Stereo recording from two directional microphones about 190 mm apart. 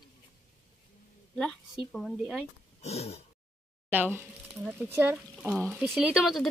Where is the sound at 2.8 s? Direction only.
35° left (ahead or behind).